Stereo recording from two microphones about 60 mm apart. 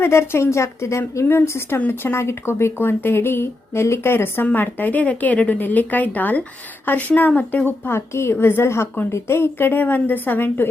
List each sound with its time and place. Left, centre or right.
0.0 s a woman's voice: left
7.9 s a woman's voice: left